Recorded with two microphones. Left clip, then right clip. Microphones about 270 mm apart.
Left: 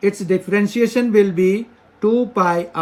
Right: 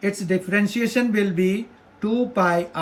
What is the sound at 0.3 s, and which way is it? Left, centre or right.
Speech, centre.